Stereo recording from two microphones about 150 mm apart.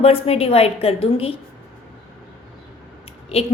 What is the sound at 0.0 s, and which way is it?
A woman's voice, 40° left (ahead or behind).